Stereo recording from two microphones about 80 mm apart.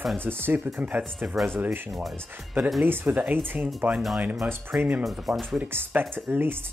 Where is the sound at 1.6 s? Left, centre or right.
Centre.